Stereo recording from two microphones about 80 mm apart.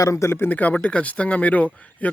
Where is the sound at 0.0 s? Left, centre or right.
Left.